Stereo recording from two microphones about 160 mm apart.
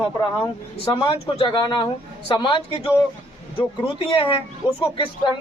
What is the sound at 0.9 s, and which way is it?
Speech, 35° left (ahead or behind).